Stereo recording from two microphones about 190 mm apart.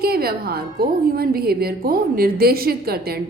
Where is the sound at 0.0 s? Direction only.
55° right (ahead or behind).